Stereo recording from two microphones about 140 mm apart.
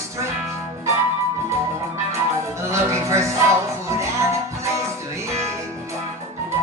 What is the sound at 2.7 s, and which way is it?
Music, 20° right (ahead or behind).